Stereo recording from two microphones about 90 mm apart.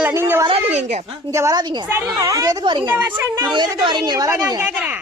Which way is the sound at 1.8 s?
30° right (ahead or behind).